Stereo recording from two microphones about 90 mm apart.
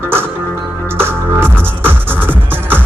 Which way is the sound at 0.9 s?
25° right (ahead or behind).